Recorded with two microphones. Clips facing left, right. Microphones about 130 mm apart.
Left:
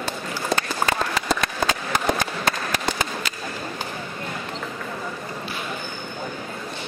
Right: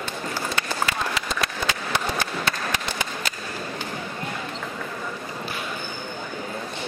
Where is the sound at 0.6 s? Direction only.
40° left (ahead or behind).